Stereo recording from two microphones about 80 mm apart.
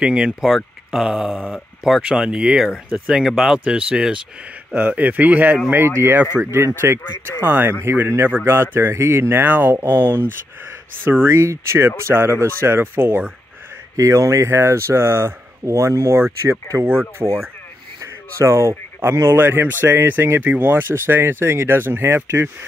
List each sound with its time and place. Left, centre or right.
0.0 s speech: centre
0.4 s speech: centre; by 7.0 s right
7.0 s speech: left
7.4 s speech: right
13.9 s speech: right
16.8 s speech: right
18.4 s speech: right